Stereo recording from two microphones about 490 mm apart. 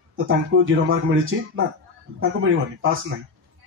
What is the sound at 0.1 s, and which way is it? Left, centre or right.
Speech, right.